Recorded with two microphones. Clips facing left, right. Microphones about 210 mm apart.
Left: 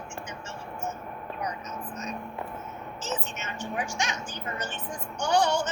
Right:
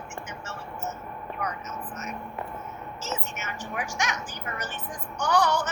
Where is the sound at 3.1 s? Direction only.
30° left (ahead or behind).